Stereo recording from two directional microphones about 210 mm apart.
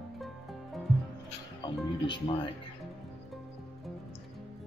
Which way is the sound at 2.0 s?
20° left (ahead or behind).